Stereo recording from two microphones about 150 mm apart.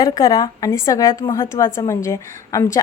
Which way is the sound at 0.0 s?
25° left (ahead or behind).